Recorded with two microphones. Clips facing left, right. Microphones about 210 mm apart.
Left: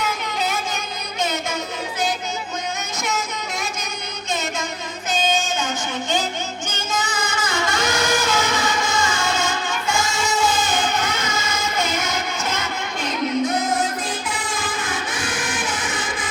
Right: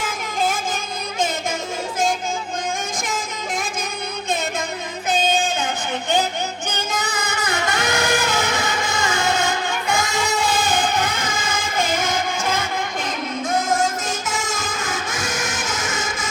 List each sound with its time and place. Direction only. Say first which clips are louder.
0.0 s music: right 1 dB; 50° right (ahead or behind)
5.1 s child singing: right 1 dB; 55° right (ahead or behind)
6.7 s music: right 1 dB; 60° right (ahead or behind); by 16.3 s 45° right (ahead or behind)